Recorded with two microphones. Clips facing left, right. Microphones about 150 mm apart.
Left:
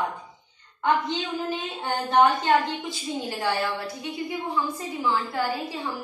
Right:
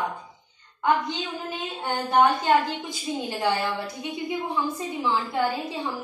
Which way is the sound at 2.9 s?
20° right (ahead or behind).